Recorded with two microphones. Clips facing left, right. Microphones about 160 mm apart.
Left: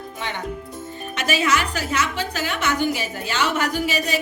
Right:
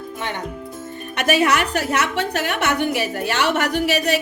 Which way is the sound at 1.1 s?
60° right (ahead or behind).